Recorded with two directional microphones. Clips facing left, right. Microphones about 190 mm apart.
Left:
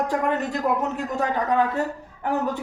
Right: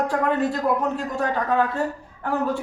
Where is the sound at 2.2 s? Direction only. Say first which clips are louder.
Right 1 dB; 20° left (ahead or behind).